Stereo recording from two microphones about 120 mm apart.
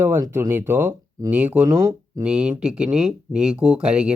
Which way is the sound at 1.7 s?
30° right (ahead or behind).